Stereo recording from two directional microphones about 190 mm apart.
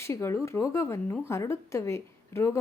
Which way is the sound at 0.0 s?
15° left (ahead or behind).